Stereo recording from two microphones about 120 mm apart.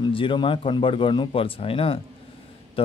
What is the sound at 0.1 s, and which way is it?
Speech, 45° left (ahead or behind).